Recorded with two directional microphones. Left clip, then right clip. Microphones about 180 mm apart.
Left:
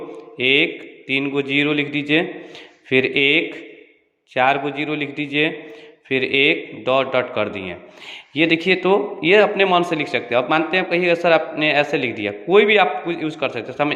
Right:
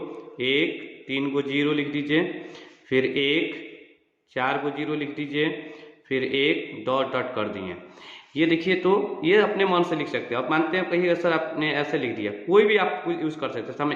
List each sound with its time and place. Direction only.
0.3 s a man's voice: 20° left (ahead or behind)